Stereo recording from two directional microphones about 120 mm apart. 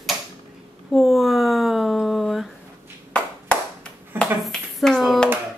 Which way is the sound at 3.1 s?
10° left (ahead or behind).